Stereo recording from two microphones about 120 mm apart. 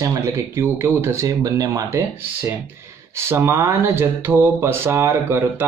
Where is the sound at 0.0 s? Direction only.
25° right (ahead or behind).